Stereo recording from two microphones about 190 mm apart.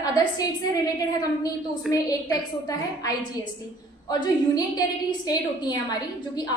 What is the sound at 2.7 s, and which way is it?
Speech, 20° left (ahead or behind).